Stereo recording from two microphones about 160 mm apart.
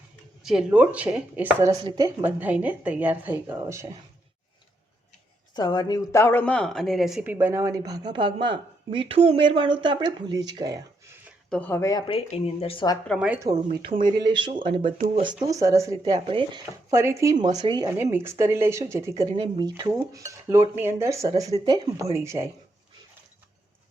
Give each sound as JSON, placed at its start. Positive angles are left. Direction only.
{"t": 0.4, "sound": "speech", "side_deg": -5}
{"t": 1.8, "sound": "speech", "side_deg": -25}
{"t": 2.2, "sound": "speech", "side_deg": -10}
{"t": 5.5, "sound": "speech", "side_deg": 25}
{"t": 11.4, "sound": "speech", "side_deg": 10}
{"t": 13.1, "sound": "speech", "side_deg": -10}
{"t": 13.4, "sound": "speech", "side_deg": -25}
{"t": 16.0, "sound": "speech", "side_deg": -40}
{"t": 16.9, "sound": "speech", "side_deg": -15}
{"t": 17.9, "sound": "speech", "side_deg": -15}